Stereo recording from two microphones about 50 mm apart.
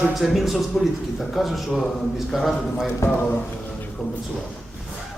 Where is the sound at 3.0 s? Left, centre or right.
Left.